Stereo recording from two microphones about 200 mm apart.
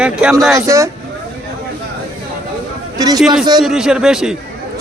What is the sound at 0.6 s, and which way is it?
Speech, 15° right (ahead or behind).